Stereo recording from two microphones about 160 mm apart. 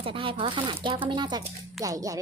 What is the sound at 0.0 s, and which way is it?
Speech, 35° right (ahead or behind).